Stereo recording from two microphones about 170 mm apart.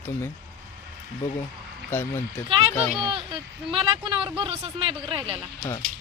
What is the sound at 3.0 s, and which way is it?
A woman's voice, 30° right (ahead or behind).